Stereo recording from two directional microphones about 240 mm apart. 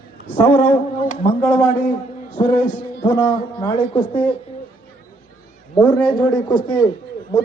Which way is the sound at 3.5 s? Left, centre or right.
Left.